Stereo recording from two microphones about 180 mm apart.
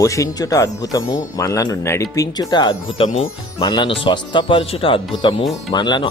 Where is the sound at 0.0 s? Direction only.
20° left (ahead or behind).